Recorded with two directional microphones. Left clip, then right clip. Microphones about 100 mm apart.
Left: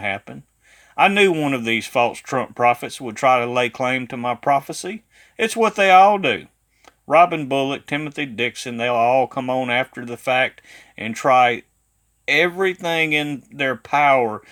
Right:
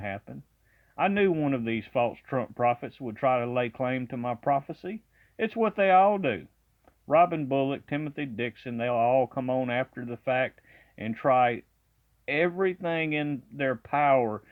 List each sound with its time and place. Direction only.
0.0 s speech: 35° left (ahead or behind)